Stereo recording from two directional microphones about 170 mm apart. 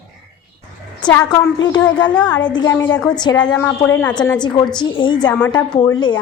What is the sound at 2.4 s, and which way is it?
Speech, 25° left (ahead or behind).